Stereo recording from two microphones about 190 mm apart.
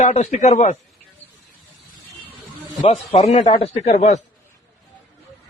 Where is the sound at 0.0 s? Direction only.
40° left (ahead or behind).